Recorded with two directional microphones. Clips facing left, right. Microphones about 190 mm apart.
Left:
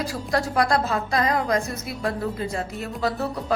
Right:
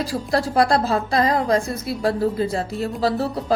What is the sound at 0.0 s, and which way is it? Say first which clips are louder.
A woman's voice: right 3 dB; 30° right (ahead or behind).